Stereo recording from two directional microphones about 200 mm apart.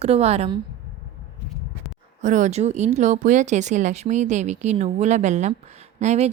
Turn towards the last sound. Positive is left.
turn(degrees=-35)  # may be behind; listen again after turning